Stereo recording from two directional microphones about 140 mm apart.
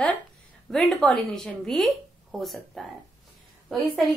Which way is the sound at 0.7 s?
5° left (ahead or behind).